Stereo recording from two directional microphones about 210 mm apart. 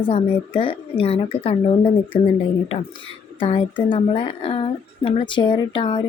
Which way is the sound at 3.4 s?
25° left (ahead or behind).